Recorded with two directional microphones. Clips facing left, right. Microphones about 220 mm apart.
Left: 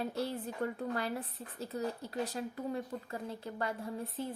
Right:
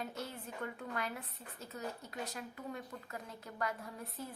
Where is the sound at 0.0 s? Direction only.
35° left (ahead or behind).